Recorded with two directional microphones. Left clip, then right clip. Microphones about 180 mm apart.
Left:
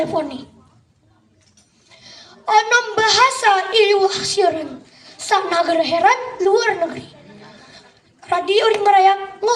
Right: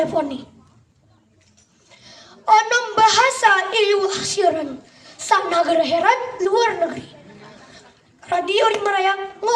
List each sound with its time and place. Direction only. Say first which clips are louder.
0.0 s a woman's voice: even; 20° right (ahead or behind)
1.9 s a woman's voice: left 2 dB; 20° right (ahead or behind)